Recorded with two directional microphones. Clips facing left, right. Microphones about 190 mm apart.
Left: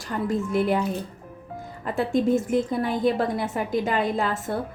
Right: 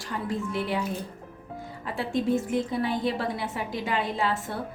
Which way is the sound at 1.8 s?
50° left (ahead or behind).